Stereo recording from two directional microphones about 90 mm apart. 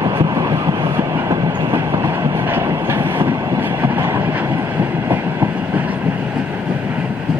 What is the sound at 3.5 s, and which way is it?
Vehicle, 20° right (ahead or behind).